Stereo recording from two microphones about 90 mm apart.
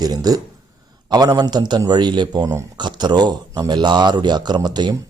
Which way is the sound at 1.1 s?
50° right (ahead or behind).